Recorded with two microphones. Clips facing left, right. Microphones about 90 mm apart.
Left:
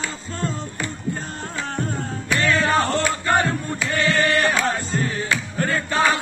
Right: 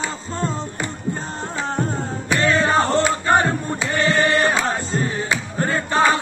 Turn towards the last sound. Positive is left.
turn(degrees=-25)  # may be behind; listen again after turning